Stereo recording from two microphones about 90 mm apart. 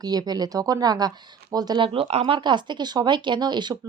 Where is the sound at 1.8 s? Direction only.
90° right; by 3.7 s 55° right (ahead or behind).